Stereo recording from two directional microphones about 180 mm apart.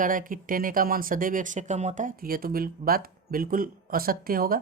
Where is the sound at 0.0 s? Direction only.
50° right (ahead or behind).